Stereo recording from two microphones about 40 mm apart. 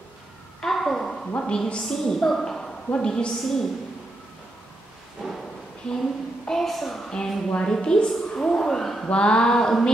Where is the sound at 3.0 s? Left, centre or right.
Centre.